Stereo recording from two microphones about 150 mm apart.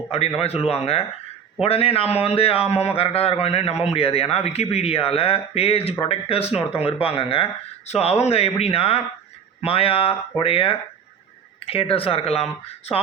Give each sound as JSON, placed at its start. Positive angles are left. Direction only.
{"t": 0.3, "sound": "speech", "side_deg": 40}